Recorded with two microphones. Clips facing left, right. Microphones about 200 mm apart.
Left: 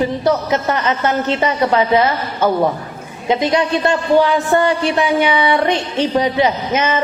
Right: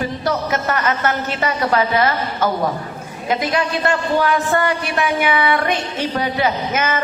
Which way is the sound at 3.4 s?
25° left (ahead or behind).